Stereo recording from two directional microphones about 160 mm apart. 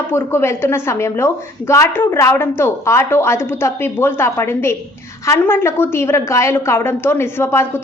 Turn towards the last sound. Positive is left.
turn(degrees=15)  # may be behind; listen again after turning